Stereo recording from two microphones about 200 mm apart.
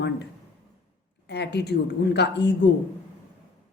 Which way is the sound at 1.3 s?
55° left (ahead or behind).